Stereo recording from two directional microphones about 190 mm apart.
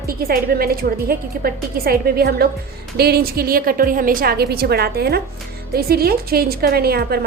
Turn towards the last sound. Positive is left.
turn(degrees=-55)  # may be behind; listen again after turning